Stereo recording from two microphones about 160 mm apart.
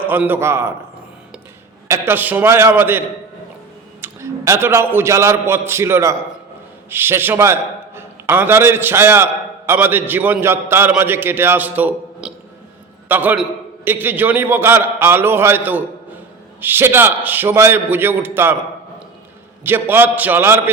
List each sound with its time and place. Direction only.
0.0 s a man's voice: 10° right (ahead or behind)
1.9 s a man's voice: 15° right (ahead or behind)
4.0 s a man's voice: 15° right (ahead or behind)
19.6 s a man's voice: 15° right (ahead or behind)